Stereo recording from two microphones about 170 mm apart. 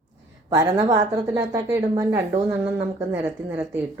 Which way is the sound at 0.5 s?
20° right (ahead or behind).